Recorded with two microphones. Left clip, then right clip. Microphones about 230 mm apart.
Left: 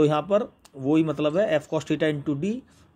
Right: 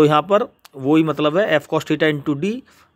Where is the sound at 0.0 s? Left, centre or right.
Right.